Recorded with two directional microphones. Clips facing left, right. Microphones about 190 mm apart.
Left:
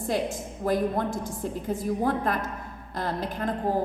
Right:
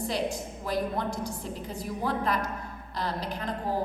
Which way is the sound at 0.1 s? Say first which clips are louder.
Left 3 dB; 50° left (ahead or behind).